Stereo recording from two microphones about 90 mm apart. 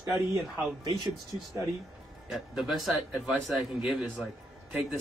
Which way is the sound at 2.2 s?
5° right (ahead or behind).